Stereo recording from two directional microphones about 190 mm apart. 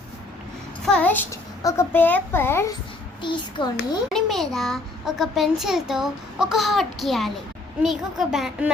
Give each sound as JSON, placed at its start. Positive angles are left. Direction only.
{"t": 0.9, "sound": "a child's voice", "side_deg": 5}
{"t": 3.2, "sound": "a child's voice", "side_deg": 25}
{"t": 4.1, "sound": "a child's voice", "side_deg": 0}